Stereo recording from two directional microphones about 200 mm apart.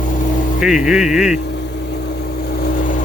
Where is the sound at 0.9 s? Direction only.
Centre (ahead or behind).